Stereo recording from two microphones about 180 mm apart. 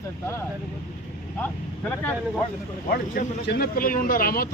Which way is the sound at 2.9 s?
60° left (ahead or behind).